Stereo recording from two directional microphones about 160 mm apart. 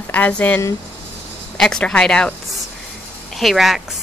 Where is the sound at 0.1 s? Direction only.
10° left (ahead or behind).